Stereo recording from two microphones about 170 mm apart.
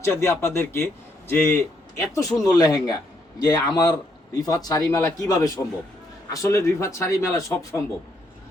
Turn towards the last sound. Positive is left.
turn(degrees=20)  # may be behind; listen again after turning